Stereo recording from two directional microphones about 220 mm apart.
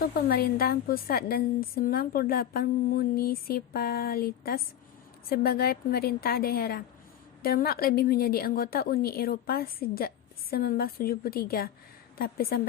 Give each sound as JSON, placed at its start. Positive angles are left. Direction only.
{"t": 0.0, "sound": "a woman's voice", "side_deg": 45}